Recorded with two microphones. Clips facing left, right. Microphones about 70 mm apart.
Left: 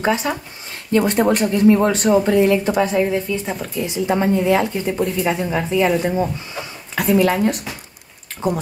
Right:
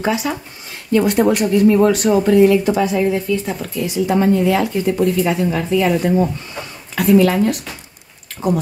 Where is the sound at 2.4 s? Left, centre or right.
Left.